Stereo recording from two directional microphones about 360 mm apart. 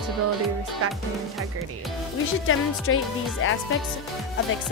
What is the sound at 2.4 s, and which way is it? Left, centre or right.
Speech, left.